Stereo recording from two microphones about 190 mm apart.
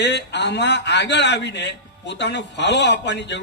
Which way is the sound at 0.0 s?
65° left (ahead or behind).